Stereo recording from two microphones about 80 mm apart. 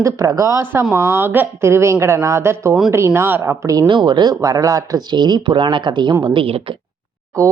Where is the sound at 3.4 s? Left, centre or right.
Right.